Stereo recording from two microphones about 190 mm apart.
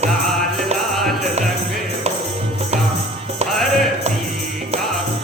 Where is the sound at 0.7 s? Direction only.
35° right (ahead or behind).